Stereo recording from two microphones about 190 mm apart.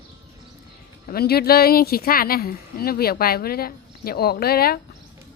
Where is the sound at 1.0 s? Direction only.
55° left (ahead or behind).